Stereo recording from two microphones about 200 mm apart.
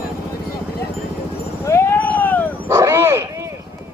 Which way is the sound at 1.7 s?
15° left (ahead or behind).